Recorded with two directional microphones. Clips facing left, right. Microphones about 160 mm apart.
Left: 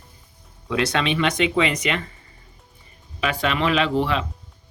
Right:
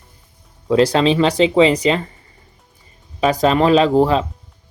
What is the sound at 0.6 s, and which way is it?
Speech, 35° right (ahead or behind).